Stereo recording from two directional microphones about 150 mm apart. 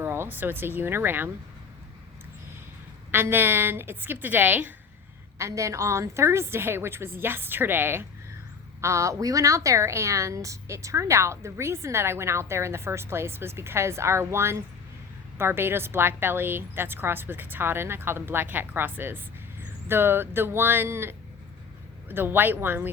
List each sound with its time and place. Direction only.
0.0 s speech: 15° right (ahead or behind)
3.1 s a woman's voice: 15° right (ahead or behind)